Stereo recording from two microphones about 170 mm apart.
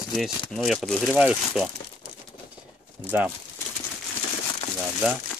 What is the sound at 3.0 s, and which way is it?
Speech, 10° right (ahead or behind).